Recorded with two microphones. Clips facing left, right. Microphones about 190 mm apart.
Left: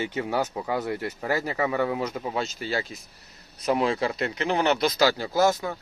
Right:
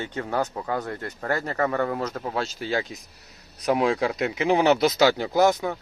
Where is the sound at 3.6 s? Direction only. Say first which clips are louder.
Right 2 dB; centre (ahead or behind); by 5.6 s 15° right (ahead or behind).